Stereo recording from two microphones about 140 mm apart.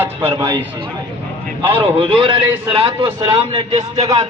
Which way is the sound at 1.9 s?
35° right (ahead or behind).